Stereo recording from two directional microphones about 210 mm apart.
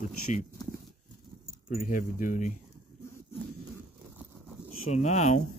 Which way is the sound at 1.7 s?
40° left (ahead or behind).